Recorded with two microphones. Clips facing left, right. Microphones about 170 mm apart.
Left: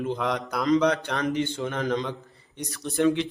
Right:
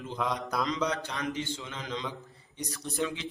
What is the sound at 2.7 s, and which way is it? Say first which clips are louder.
Speech: left 10 dB; 65° left (ahead or behind).